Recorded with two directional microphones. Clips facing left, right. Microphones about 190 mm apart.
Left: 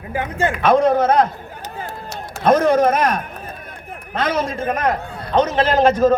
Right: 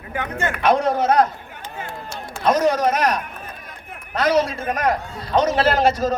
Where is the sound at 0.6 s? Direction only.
55° left (ahead or behind).